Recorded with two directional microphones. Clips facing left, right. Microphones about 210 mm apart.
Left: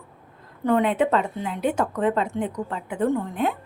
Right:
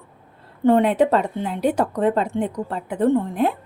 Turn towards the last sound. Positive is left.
turn(degrees=-35)  # may be behind; listen again after turning